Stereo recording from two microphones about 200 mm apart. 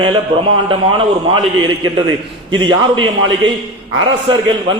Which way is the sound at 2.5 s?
25° right (ahead or behind).